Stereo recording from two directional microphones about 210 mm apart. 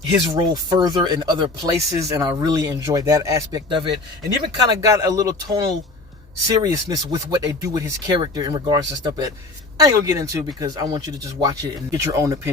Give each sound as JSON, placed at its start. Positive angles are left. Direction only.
{"t": 0.1, "sound": "speech", "side_deg": -20}